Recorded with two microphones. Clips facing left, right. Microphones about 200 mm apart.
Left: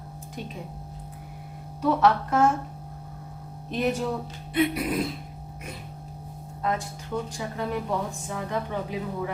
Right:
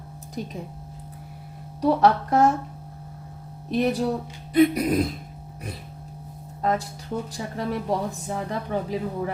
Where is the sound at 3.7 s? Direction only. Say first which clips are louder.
Right 3 dB; 35° right (ahead or behind).